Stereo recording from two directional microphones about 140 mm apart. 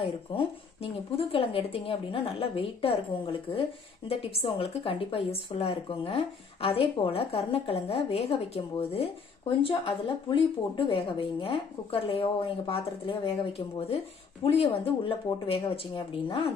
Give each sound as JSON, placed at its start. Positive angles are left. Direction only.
{"t": 0.3, "sound": "a woman's voice", "side_deg": 40}